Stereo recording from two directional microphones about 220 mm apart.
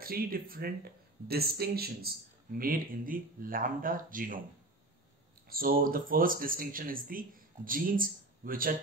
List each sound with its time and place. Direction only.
0.0 s speech: 40° right (ahead or behind)
5.5 s speech: 40° right (ahead or behind)